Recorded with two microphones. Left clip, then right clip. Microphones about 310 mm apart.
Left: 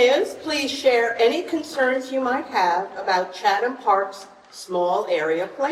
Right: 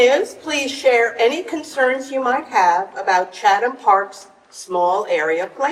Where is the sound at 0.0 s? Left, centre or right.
Right.